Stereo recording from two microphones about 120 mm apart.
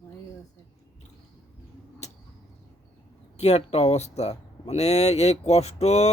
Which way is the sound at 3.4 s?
60° left (ahead or behind).